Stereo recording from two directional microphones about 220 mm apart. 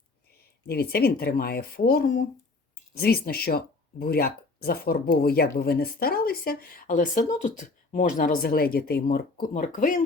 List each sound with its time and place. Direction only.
0.7 s speech: 45° left (ahead or behind)